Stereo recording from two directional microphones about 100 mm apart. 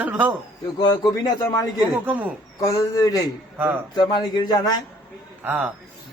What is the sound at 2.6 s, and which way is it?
Speech, 35° left (ahead or behind).